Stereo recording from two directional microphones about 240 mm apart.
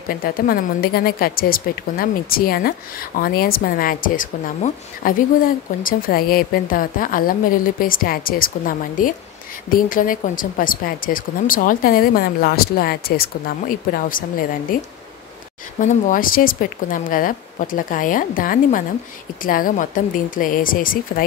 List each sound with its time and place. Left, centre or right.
0.1 s speech: left